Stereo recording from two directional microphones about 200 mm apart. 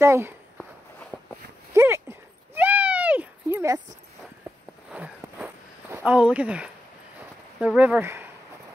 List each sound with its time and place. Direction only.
0.0 s speech: 15° right (ahead or behind)
1.1 s a sound: 5° right (ahead or behind)
4.9 s walk: 5° right (ahead or behind)
7.6 s speech: 5° right (ahead or behind)